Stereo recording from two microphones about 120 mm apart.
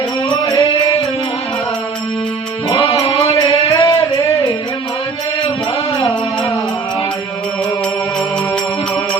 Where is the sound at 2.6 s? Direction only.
30° left (ahead or behind).